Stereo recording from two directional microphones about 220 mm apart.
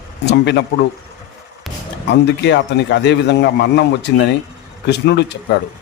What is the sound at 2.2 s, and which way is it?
A man's voice, 55° left (ahead or behind).